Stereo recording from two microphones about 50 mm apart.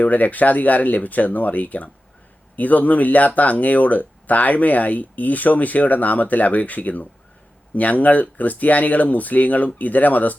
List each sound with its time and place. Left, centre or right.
0.0 s speech: left